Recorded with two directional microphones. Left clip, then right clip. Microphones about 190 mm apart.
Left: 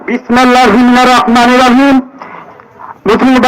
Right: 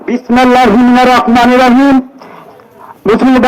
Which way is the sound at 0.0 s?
70° right (ahead or behind).